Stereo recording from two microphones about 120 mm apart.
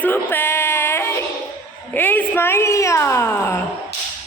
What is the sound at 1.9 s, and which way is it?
A woman's voice, 15° left (ahead or behind).